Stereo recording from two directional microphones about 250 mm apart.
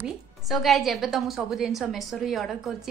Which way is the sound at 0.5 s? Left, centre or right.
Centre.